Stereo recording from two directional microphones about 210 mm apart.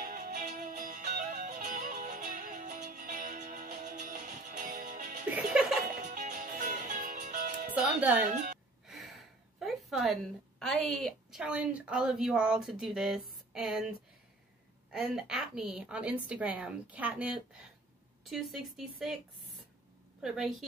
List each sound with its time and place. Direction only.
0.0 s music: 40° right (ahead or behind)
5.3 s a woman's voice: 5° right (ahead or behind)
6.0 s music: 35° right (ahead or behind)
7.7 s music: 5° right (ahead or behind)
8.8 s gasp: centre (ahead or behind)
10.6 s a woman's voice: centre (ahead or behind)
20.2 s a woman's voice: centre (ahead or behind)